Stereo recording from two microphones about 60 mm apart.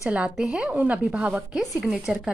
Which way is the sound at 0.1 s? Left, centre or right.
Centre.